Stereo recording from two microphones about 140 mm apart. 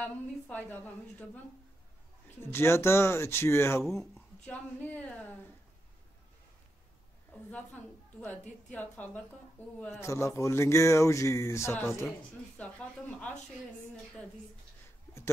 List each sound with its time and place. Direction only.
0.0 s speech: 10° left (ahead or behind)
2.4 s speech: 15° left (ahead or behind)
3.8 s speech: centre (ahead or behind)
4.8 s speech: 10° left (ahead or behind)
7.3 s a woman's voice: 10° left (ahead or behind)
8.7 s speech: 10° left (ahead or behind)